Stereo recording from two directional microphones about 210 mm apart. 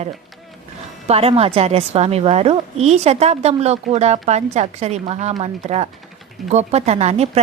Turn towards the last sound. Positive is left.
turn(degrees=-30)  # may be behind; listen again after turning